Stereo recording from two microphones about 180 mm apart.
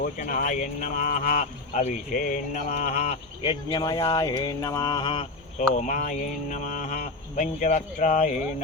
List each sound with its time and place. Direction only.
0.0 s speech: 50° left (ahead or behind); by 5.6 s 30° left (ahead or behind)
5.8 s speech: 45° left (ahead or behind)